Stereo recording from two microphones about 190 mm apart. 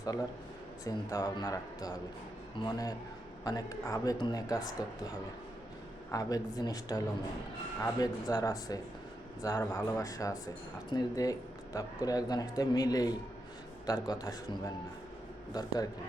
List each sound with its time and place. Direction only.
0.9 s speech: 20° left (ahead or behind)
6.1 s speech: 20° left (ahead or behind)
15.5 s speech: 20° left (ahead or behind)